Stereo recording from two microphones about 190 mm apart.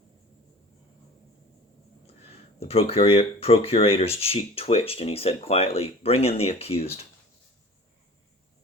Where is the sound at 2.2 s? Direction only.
30° left (ahead or behind).